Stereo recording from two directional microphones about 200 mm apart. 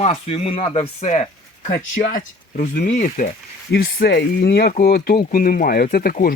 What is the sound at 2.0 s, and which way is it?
Speech, 45° left (ahead or behind).